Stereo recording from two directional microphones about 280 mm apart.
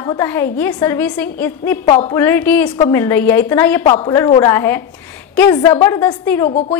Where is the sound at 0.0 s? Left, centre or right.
Centre.